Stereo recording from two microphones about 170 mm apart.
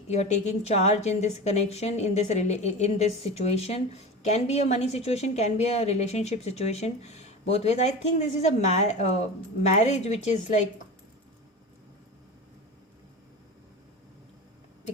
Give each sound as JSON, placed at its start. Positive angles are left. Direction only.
{"t": 0.1, "sound": "a woman's voice", "side_deg": 40}